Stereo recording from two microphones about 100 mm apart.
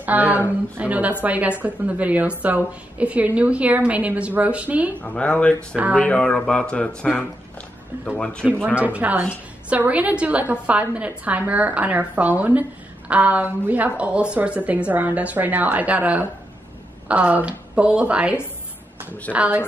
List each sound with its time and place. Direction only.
0.0 s a woman's voice: 15° right (ahead or behind)
5.0 s speech: 15° left (ahead or behind)
8.6 s a woman's voice: 15° right (ahead or behind)